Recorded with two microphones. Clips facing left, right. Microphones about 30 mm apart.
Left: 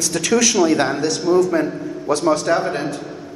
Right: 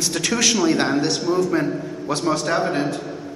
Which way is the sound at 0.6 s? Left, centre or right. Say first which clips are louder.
Left 2 dB; centre.